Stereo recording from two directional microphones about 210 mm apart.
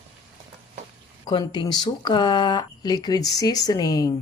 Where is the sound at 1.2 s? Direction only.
20° left (ahead or behind).